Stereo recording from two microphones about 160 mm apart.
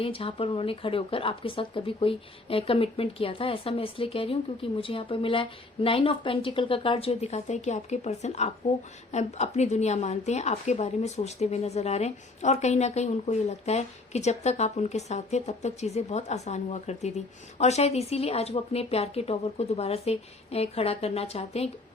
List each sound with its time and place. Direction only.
0.0 s a woman's voice: 35° left (ahead or behind)